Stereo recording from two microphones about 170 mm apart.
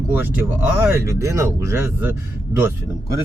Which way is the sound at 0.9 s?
15° right (ahead or behind).